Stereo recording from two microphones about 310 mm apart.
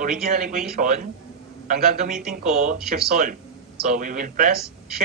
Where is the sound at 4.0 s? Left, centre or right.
Right.